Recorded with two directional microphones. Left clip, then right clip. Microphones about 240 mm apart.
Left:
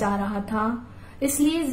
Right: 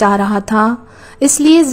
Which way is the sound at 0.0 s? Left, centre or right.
Right.